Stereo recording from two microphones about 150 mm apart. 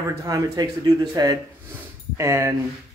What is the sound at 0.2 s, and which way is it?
Speech, 25° right (ahead or behind).